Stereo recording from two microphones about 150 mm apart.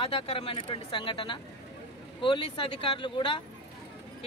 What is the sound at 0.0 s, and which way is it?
Speech, 40° left (ahead or behind).